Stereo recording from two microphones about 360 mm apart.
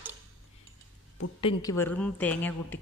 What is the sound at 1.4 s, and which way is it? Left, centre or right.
A woman's voice, centre.